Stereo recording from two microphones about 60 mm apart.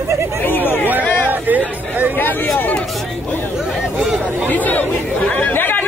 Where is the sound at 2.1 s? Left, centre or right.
Left.